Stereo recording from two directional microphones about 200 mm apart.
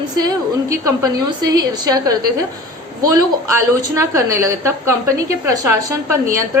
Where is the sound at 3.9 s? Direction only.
15° right (ahead or behind).